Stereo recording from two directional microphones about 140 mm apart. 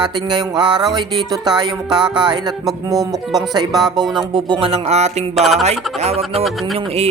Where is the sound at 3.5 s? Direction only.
30° right (ahead or behind); by 5.2 s 50° right (ahead or behind).